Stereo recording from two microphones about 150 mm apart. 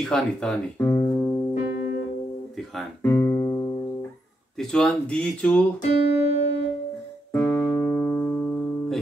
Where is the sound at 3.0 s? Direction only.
20° left (ahead or behind).